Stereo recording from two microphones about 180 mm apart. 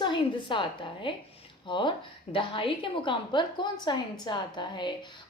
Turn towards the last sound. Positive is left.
turn(degrees=25)  # may be behind; listen again after turning